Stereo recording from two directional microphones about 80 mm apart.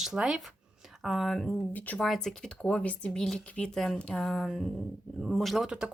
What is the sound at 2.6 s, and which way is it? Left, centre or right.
A woman's voice, centre.